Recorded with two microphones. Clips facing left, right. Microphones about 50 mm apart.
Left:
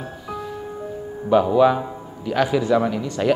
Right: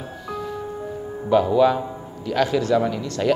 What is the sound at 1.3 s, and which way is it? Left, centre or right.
Speech, centre.